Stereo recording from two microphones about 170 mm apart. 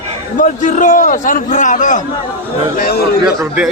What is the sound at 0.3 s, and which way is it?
A man's voice, 50° left (ahead or behind).